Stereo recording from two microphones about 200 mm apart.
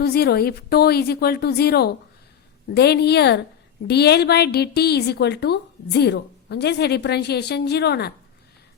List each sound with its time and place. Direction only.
0.0 s a woman's voice: 50° left (ahead or behind)